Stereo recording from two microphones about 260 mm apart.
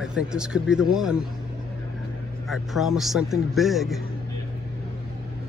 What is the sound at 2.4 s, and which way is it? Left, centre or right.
Speech, centre.